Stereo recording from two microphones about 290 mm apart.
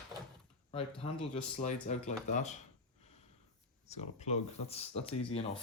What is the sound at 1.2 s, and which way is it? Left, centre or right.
Speech, left.